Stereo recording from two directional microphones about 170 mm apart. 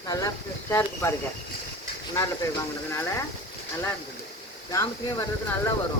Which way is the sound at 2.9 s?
15° left (ahead or behind).